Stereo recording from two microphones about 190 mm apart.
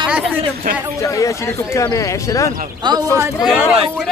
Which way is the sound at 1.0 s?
15° left (ahead or behind).